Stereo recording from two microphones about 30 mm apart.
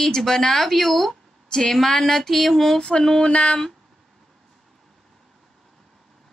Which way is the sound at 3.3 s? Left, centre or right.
Left.